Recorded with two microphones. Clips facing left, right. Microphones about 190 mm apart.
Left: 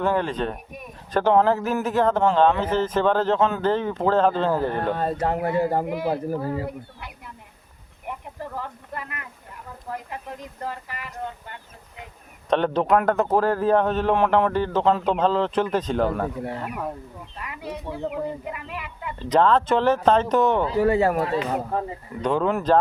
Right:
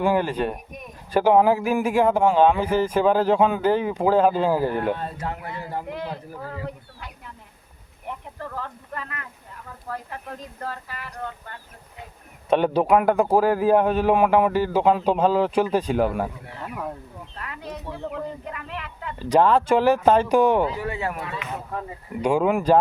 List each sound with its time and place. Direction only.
0.0 s speech: 10° right (ahead or behind)
4.9 s speech: 45° left (ahead or behind)
8.0 s speech: 15° left (ahead or behind)
12.5 s speech: 10° right (ahead or behind)
17.3 s speech: 15° left (ahead or behind)
19.2 s speech: 10° right (ahead or behind)
20.7 s speech: 40° left (ahead or behind)
22.2 s speech: 10° right (ahead or behind)